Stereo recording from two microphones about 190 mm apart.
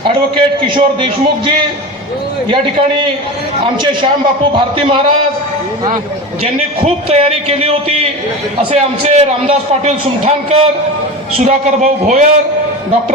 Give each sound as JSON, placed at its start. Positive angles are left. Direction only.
{"t": 0.1, "sound": "a man's voice", "side_deg": -25}
{"t": 4.5, "sound": "a man's voice", "side_deg": -25}
{"t": 6.4, "sound": "a man's voice", "side_deg": -30}